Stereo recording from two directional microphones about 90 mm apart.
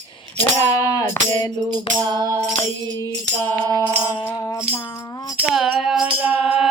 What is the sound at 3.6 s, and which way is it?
Music, 45° right (ahead or behind).